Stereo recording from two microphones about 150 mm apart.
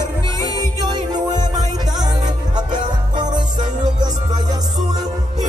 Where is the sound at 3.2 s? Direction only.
30° right (ahead or behind).